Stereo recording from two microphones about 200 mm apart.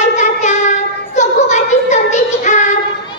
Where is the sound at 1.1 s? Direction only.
35° left (ahead or behind).